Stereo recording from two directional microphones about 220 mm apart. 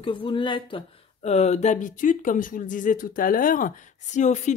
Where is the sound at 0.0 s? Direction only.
20° left (ahead or behind).